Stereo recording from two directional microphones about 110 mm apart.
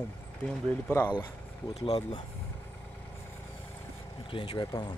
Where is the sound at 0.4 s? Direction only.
15° left (ahead or behind).